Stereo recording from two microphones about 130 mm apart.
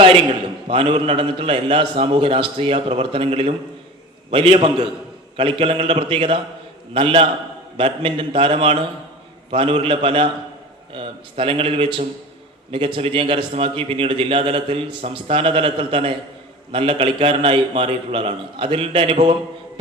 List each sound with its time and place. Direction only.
0.7 s a man's voice: 45° right (ahead or behind)